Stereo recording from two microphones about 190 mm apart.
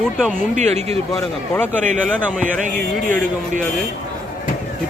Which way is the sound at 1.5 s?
10° left (ahead or behind).